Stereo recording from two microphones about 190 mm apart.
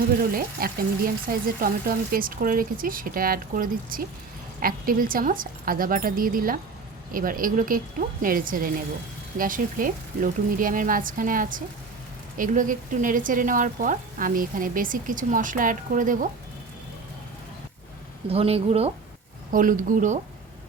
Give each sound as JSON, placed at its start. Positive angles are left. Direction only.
{"t": 0.2, "sound": "speech", "side_deg": -50}
{"t": 18.3, "sound": "speech", "side_deg": -30}
{"t": 19.5, "sound": "speech", "side_deg": -45}